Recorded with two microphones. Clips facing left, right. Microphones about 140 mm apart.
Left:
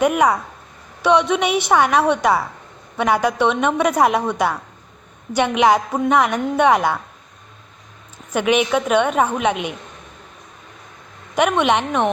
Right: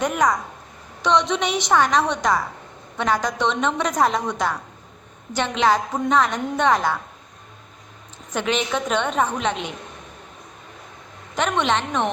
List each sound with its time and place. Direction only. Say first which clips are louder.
0.0 s a woman's voice: left 4 dB; 10° left (ahead or behind)
8.3 s a woman's voice: left 6 dB; 10° left (ahead or behind)
11.3 s a woman's voice: left 5 dB; 10° left (ahead or behind)